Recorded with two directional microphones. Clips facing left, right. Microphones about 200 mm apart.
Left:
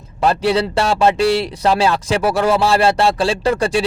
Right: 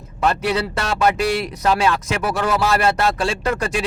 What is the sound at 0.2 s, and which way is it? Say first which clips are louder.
Speech: left 4 dB; 30° left (ahead or behind).